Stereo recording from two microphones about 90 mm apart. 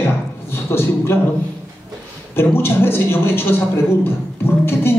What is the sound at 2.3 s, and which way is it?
A man's voice, 25° left (ahead or behind).